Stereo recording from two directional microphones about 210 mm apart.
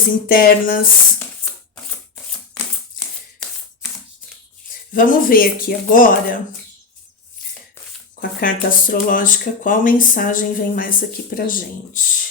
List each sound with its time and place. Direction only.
0.3 s speech: 45° left (ahead or behind)
4.9 s speech: 40° left (ahead or behind)
8.2 s speech: 40° left (ahead or behind)